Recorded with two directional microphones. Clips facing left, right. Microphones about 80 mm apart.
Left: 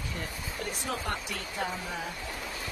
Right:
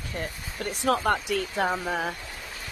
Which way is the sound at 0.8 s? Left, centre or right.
Right.